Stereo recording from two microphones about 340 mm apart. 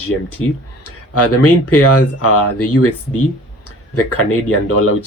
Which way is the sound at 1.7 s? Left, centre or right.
Left.